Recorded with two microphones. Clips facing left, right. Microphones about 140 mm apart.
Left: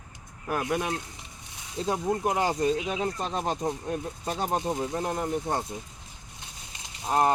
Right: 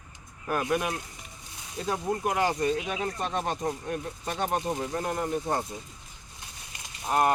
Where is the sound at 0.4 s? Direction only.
15° left (ahead or behind).